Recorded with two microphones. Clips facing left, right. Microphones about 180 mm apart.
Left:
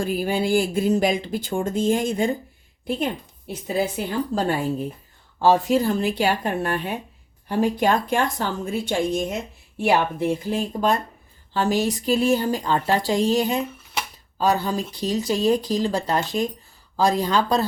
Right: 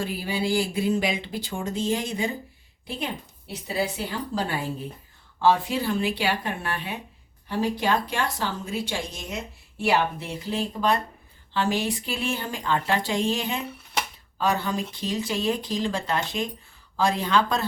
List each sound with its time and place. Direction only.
0.0 s a woman's voice: 50° left (ahead or behind)